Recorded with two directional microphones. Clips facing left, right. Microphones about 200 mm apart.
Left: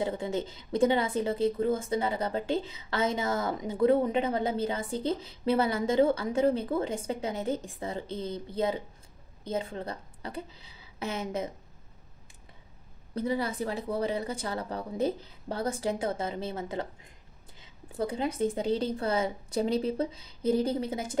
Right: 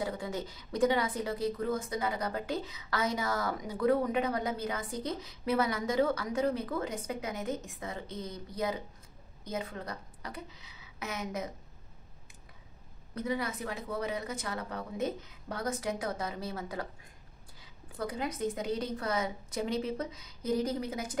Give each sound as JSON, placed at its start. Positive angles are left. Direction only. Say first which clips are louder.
{"t": 0.0, "sound": "a woman's voice", "louder": "left 5 dB", "side_deg": 25}
{"t": 13.1, "sound": "speech", "louder": "left 4 dB", "side_deg": 30}